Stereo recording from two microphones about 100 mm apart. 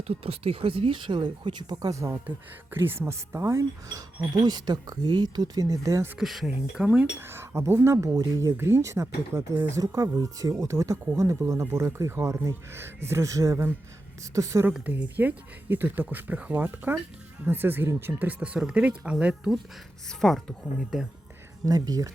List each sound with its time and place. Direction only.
0.1 s speech: 75° right (ahead or behind); by 2.2 s 30° right (ahead or behind)
2.2 s cutlery: 20° right (ahead or behind)
6.1 s speech: 5° right (ahead or behind)
7.2 s speech: 25° right (ahead or behind)
9.6 s cutlery: 30° right (ahead or behind)
11.7 s speech: 30° right (ahead or behind)
14.3 s cutlery: 30° right (ahead or behind)
14.7 s speech: 15° right (ahead or behind)
20.1 s speech: 5° left (ahead or behind)
21.7 s cutlery: 40° right (ahead or behind)